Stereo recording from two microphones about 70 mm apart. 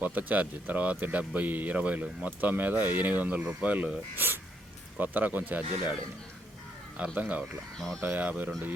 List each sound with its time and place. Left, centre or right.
0.0 s speech: right